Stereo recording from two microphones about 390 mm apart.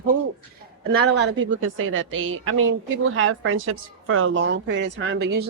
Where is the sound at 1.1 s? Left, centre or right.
Right.